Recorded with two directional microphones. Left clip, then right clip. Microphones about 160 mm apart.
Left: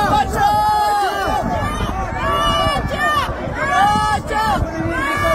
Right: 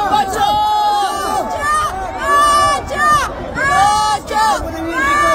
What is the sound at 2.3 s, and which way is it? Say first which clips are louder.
Run: right 6 dB; 55° right (ahead or behind).